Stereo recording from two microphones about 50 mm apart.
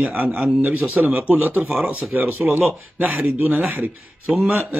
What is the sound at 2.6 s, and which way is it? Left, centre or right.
A man's voice, right.